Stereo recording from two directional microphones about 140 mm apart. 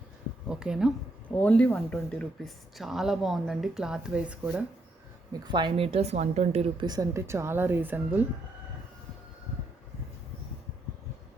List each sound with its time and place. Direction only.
0.4 s speech: 5° right (ahead or behind)
1.4 s speech: 10° left (ahead or behind); by 4.6 s 10° right (ahead or behind)
5.3 s speech: 35° right (ahead or behind); by 6.7 s 50° right (ahead or behind)
6.7 s speech: 30° right (ahead or behind); by 8.2 s 15° right (ahead or behind)